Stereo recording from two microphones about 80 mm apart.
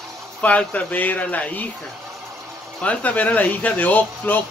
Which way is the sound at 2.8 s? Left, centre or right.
Centre.